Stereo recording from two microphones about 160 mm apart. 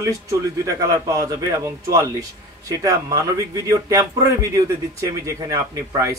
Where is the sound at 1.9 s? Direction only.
20° right (ahead or behind).